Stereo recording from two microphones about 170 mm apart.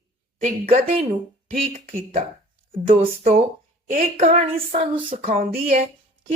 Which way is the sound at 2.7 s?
35° right (ahead or behind).